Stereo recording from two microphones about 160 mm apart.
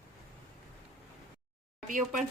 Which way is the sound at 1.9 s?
55° right (ahead or behind).